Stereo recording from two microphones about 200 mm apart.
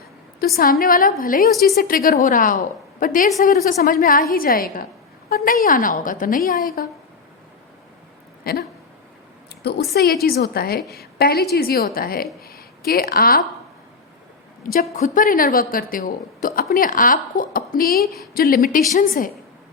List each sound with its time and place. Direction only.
0.3 s a woman's voice: 45° left (ahead or behind)
8.4 s a sound: 45° left (ahead or behind)
10.2 s a woman's voice: 50° left (ahead or behind)
14.6 s a woman's voice: 45° left (ahead or behind)
18.0 s a woman's voice: centre (ahead or behind)
18.3 s a woman's voice: 50° left (ahead or behind)